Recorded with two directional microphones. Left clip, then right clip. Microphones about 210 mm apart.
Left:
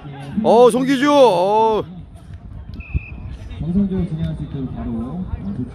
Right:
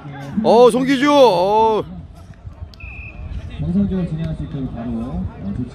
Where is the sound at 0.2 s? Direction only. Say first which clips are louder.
Right 1 dB; centre (ahead or behind).